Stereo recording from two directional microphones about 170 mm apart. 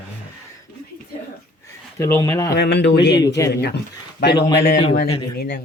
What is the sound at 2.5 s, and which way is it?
Speech, 75° left (ahead or behind).